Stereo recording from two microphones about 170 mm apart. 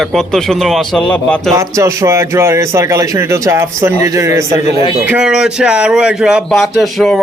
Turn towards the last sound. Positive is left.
turn(degrees=0)  # may be behind; listen again after turning